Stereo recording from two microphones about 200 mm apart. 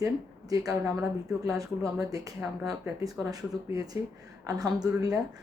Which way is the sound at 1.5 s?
15° right (ahead or behind).